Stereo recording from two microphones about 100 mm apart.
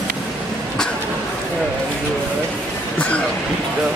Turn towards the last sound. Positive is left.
turn(degrees=10)  # may be behind; listen again after turning